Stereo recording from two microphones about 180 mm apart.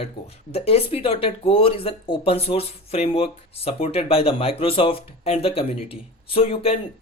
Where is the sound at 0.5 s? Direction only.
35° left (ahead or behind).